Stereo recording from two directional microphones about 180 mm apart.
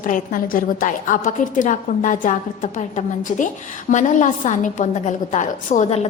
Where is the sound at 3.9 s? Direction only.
45° left (ahead or behind).